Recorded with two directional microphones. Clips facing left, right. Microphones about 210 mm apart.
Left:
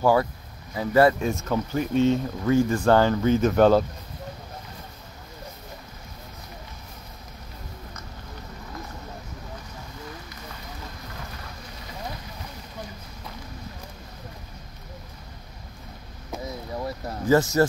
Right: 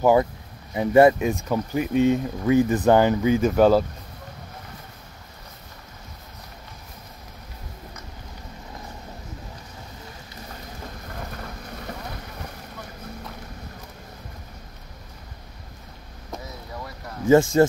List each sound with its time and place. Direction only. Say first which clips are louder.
0.0 s speech: right 3 dB; 20° right (ahead or behind)
17.3 s speech: right 4 dB; 25° right (ahead or behind)